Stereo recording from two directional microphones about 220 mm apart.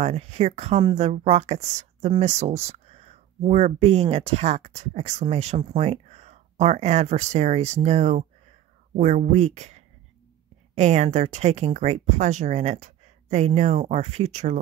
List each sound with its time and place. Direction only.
0.0 s speech: 30° right (ahead or behind)